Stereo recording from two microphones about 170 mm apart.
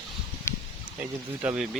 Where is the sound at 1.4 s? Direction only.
5° right (ahead or behind).